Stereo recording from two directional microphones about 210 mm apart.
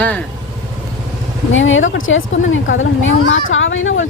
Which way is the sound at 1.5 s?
65° left (ahead or behind).